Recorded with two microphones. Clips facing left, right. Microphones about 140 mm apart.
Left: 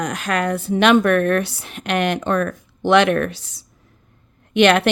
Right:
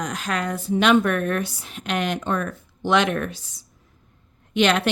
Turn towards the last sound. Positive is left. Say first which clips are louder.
# left 5 dB
turn(degrees=65)  # may be behind; listen again after turning